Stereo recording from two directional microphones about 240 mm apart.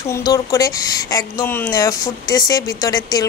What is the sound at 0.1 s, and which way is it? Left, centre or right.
Speech, centre.